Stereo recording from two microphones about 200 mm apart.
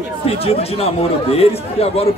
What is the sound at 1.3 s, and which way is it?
Speech, 30° left (ahead or behind).